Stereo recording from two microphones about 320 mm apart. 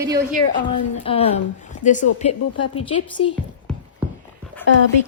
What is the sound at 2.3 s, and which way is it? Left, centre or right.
Speech, left.